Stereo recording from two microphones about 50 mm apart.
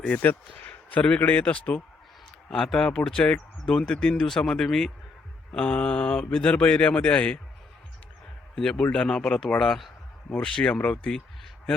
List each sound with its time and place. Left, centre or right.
0.2 s a man's voice: left
2.7 s a man's voice: centre
8.5 s a man's voice: centre
10.4 s a man's voice: left